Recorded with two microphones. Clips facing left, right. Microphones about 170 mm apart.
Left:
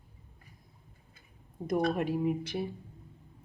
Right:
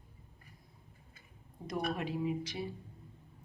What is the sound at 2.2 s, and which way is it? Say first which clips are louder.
Speech: left 4 dB; 55° left (ahead or behind).